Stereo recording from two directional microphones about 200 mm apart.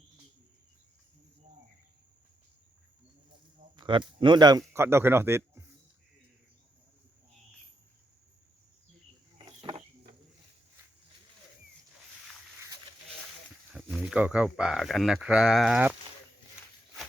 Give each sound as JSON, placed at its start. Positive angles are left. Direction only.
{"t": 3.8, "sound": "speech", "side_deg": -25}
{"t": 9.4, "sound": "cricket", "side_deg": -25}
{"t": 13.7, "sound": "speech", "side_deg": 0}